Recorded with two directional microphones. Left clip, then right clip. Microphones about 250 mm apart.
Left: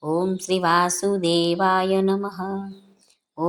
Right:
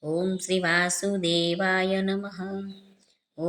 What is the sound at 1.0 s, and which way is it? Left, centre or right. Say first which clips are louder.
Music: left 5 dB; centre.